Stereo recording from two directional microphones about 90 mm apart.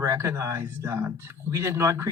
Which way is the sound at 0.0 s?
30° right (ahead or behind).